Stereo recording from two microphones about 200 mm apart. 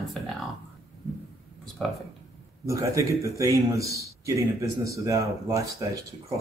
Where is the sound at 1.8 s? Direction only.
5° left (ahead or behind).